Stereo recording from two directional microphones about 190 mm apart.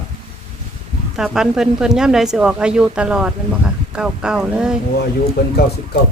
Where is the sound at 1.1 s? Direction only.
Centre (ahead or behind).